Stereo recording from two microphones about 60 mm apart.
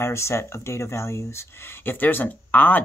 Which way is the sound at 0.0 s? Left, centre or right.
Left.